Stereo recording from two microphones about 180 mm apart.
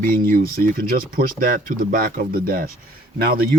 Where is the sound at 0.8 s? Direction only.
50° right (ahead or behind).